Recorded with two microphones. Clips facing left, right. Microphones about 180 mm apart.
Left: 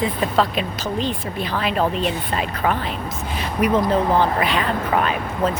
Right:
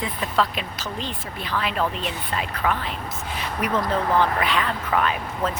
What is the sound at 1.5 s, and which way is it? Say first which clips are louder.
Speech: left 3 dB; 35° left (ahead or behind).